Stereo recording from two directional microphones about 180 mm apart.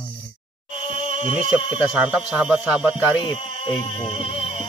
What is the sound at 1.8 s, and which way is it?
Speech, 5° right (ahead or behind).